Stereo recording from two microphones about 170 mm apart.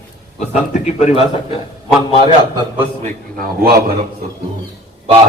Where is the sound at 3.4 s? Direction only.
60° right (ahead or behind).